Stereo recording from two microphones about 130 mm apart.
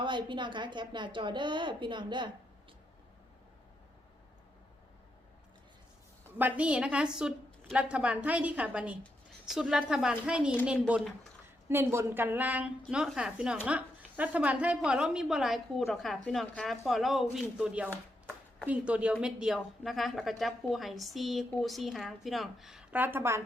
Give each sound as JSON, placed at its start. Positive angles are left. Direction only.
{"t": 0.0, "sound": "a woman's voice", "side_deg": -40}
{"t": 6.4, "sound": "a woman's voice", "side_deg": -10}
{"t": 23.0, "sound": "a woman's voice", "side_deg": -15}